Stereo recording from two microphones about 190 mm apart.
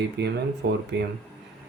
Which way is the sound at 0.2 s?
65° right (ahead or behind).